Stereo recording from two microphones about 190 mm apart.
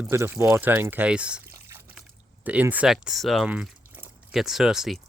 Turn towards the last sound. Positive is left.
turn(degrees=0)  # may be behind; listen again after turning